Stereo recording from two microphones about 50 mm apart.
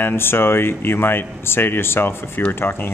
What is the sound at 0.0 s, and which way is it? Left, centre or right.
Speech, left.